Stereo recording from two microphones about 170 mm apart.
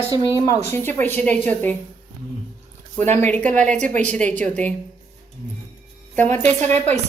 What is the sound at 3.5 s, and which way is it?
A woman's voice, 45° right (ahead or behind).